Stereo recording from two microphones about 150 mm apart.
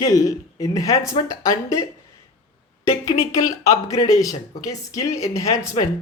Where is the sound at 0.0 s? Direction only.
25° left (ahead or behind).